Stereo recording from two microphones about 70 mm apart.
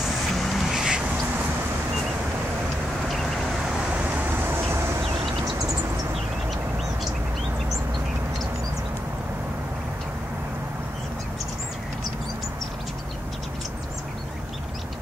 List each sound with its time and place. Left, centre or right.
0.4 s vehicle: centre
0.7 s a sound: centre
3.9 s vehicle: right